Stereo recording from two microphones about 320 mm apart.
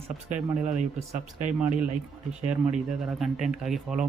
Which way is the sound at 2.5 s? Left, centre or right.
Centre.